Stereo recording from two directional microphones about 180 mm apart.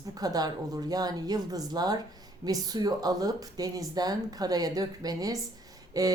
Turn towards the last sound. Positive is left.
turn(degrees=-20)  # may be behind; listen again after turning